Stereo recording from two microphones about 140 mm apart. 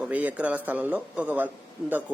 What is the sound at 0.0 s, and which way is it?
Speech, 10° right (ahead or behind).